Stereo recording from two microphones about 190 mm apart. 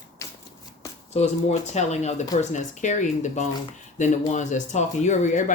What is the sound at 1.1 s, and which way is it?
Speech, 35° left (ahead or behind).